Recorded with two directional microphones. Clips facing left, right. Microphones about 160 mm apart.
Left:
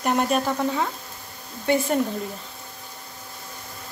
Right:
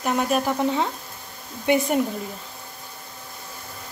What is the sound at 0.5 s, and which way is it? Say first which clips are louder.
Speech: right 2 dB; 20° right (ahead or behind).